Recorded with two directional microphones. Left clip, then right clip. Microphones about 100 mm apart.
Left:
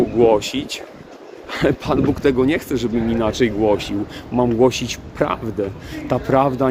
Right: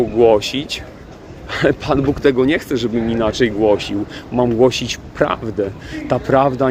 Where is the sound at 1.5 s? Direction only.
25° left (ahead or behind).